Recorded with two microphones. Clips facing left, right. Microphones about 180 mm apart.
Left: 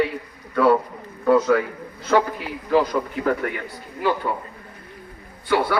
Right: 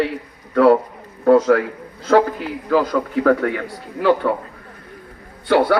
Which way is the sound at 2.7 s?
70° right (ahead or behind).